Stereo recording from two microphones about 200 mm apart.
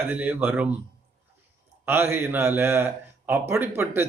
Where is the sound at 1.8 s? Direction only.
10° right (ahead or behind).